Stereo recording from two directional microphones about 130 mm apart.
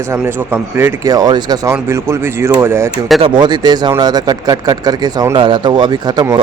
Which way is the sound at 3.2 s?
40° right (ahead or behind).